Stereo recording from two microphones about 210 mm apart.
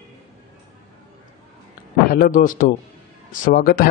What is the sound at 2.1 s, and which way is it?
A man's voice, 40° left (ahead or behind).